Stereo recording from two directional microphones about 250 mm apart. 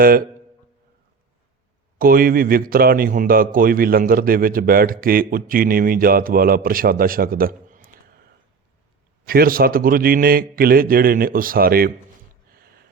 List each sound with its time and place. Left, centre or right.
0.0 s speech: right
2.0 s speech: right
9.2 s speech: right